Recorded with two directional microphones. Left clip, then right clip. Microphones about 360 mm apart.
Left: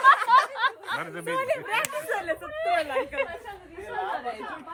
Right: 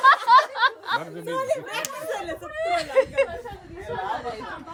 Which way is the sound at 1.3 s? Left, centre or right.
Left.